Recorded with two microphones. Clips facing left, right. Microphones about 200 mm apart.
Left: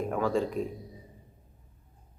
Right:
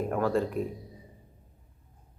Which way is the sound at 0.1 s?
Centre (ahead or behind).